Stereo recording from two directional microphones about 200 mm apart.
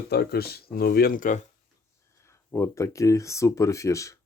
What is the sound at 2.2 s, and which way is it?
Speech, 15° left (ahead or behind).